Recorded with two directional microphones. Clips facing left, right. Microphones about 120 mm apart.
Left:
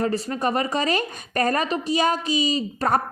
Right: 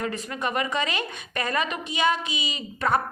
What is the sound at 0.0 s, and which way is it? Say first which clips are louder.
A woman's voice: left 6 dB; 35° left (ahead or behind).